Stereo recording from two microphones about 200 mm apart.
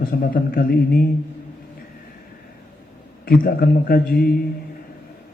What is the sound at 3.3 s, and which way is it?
Mantra, 50° left (ahead or behind).